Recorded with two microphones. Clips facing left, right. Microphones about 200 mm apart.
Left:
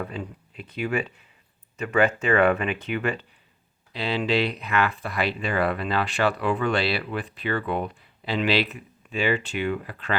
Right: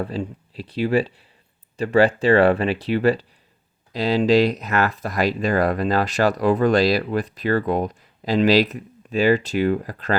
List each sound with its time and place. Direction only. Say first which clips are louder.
0.0 s speech: right 6 dB; 30° right (ahead or behind)